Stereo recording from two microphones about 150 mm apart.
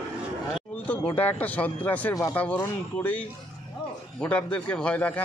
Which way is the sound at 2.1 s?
20° left (ahead or behind).